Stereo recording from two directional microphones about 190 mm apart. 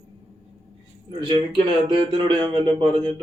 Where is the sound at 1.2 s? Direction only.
25° right (ahead or behind).